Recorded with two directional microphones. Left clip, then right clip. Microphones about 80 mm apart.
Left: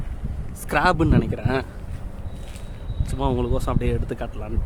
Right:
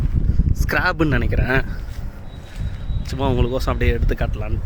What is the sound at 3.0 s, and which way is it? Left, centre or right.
Speech, centre.